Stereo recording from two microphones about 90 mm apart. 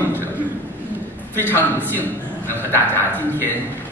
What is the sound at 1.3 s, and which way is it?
A man's voice, 20° left (ahead or behind).